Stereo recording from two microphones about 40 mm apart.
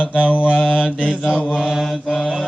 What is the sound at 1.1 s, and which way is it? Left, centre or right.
Mantra, centre.